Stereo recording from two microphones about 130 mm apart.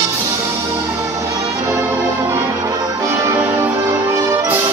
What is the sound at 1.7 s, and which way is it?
Brass instrument, 15° right (ahead or behind).